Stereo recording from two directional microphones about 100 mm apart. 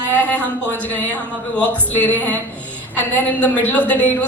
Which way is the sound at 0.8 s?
15° left (ahead or behind).